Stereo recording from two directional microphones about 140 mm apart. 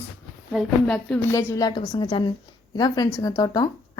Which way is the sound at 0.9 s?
5° left (ahead or behind).